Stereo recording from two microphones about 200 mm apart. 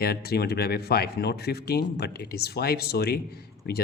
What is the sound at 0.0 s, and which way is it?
Speech, 50° left (ahead or behind).